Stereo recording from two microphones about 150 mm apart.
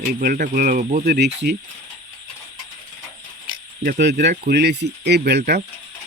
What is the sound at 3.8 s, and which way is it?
Speech, 80° right.